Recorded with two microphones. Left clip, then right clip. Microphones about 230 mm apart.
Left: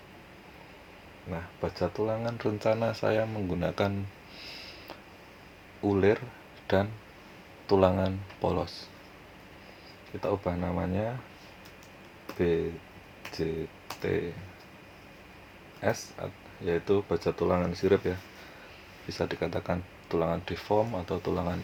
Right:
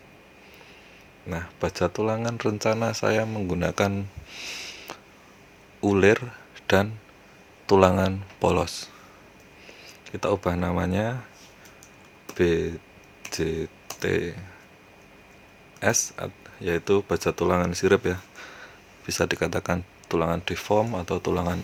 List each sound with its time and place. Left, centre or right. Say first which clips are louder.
1.3 s speech: right 6 dB; right
10.2 s speech: right 6 dB; right
15.8 s speech: right 6 dB; right